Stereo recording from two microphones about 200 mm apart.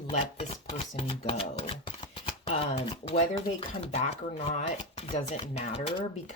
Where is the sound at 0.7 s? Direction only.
25° left (ahead or behind).